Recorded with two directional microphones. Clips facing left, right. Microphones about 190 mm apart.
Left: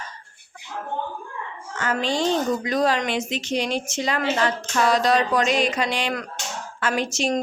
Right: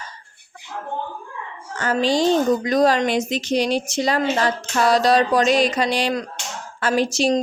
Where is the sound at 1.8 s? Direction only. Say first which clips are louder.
Right 5 dB; 35° right (ahead or behind).